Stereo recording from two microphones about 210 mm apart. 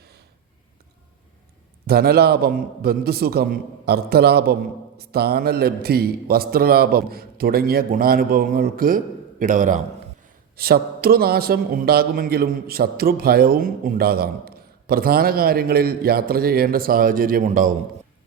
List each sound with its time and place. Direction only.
1.9 s a man's voice: 45° right (ahead or behind)